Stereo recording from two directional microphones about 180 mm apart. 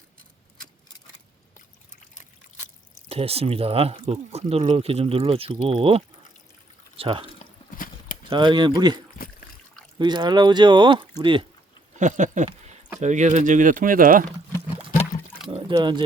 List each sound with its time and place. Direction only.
3.1 s speech: 35° right (ahead or behind)
8.3 s speech: 25° right (ahead or behind)
10.0 s speech: 25° right (ahead or behind)
11.9 s speech: 40° right (ahead or behind)
15.4 s a sound: 25° right (ahead or behind)